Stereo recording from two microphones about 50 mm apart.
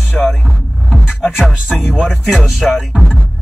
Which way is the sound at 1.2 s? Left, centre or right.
Centre.